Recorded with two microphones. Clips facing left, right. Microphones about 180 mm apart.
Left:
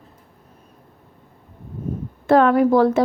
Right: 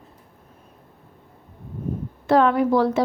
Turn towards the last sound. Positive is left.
turn(degrees=50)  # may be behind; listen again after turning